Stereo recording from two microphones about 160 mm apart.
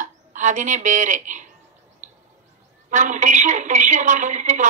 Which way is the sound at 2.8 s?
55° right (ahead or behind).